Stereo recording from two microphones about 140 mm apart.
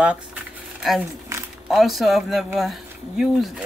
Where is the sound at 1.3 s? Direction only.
20° right (ahead or behind).